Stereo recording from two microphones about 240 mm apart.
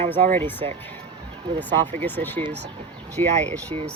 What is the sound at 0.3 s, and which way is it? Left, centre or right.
Speech, centre.